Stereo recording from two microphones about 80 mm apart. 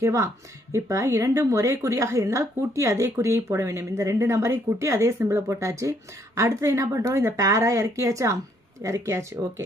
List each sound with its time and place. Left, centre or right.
0.0 s a woman's voice: right